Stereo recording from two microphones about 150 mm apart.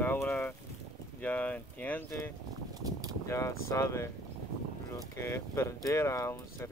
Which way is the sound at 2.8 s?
25° right (ahead or behind).